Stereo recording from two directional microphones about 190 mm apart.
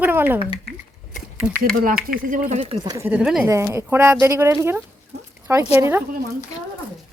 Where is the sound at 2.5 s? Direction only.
30° right (ahead or behind).